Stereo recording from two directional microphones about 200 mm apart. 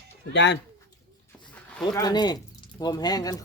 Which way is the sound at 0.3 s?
60° left (ahead or behind).